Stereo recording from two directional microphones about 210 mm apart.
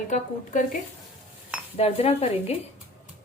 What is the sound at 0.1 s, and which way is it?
Speech, 35° left (ahead or behind).